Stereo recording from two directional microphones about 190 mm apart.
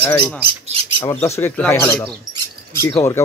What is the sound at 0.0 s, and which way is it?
Speech, 10° left (ahead or behind).